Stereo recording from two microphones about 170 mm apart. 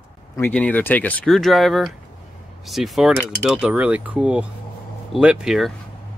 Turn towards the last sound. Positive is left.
turn(degrees=-5)  # may be behind; listen again after turning